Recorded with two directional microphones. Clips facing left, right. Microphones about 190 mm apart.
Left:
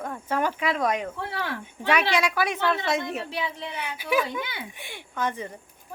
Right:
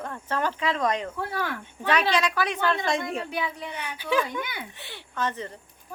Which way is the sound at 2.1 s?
10° left (ahead or behind).